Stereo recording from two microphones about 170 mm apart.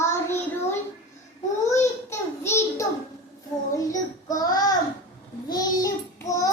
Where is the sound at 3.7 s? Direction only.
20° left (ahead or behind).